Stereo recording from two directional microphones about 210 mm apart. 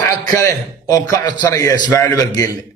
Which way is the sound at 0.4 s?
15° left (ahead or behind).